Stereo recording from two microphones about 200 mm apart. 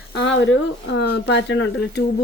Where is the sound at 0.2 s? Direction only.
70° left (ahead or behind).